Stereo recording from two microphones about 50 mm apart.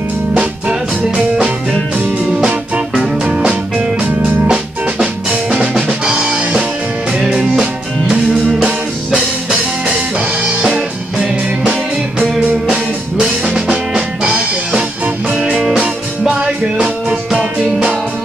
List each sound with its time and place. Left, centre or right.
0.3 s music: centre
2.4 s music: centre
4.0 s organ: right
4.5 s music: centre
5.5 s drum: centre
6.0 s music: centre
12.6 s music: centre